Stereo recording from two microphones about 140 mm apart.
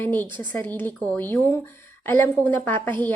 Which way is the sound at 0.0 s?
15° left (ahead or behind).